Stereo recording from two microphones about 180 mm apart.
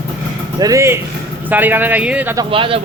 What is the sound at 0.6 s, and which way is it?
Speech, 15° right (ahead or behind).